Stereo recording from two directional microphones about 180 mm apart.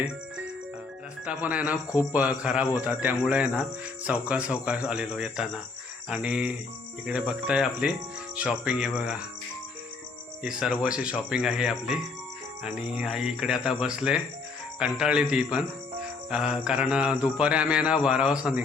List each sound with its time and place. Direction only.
1.2 s speech: 10° right (ahead or behind)
10.4 s speech: 5° right (ahead or behind)